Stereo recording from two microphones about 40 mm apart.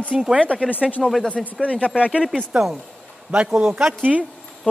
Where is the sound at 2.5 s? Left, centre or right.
Right.